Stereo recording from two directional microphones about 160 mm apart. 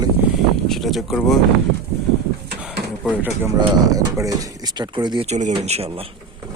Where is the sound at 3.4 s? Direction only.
20° right (ahead or behind).